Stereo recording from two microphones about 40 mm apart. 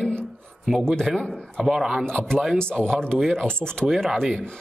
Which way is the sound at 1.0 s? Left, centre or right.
Centre.